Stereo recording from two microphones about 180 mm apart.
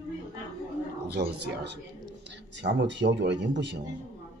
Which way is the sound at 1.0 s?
65° right (ahead or behind).